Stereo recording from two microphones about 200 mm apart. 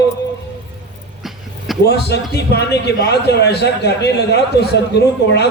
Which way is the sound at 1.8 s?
55° left (ahead or behind).